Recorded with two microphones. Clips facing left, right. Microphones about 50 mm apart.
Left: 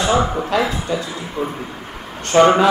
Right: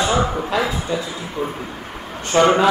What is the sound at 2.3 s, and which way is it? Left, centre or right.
Speech, centre.